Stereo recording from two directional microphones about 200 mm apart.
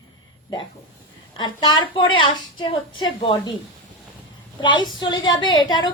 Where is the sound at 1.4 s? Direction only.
20° left (ahead or behind).